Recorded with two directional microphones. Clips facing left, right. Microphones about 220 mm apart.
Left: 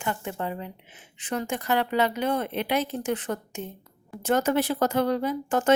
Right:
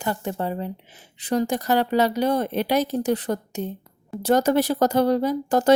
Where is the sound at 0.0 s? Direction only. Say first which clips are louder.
Right 4 dB; 35° right (ahead or behind).